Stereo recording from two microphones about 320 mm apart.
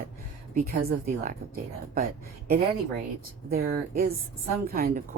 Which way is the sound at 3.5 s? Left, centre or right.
Right.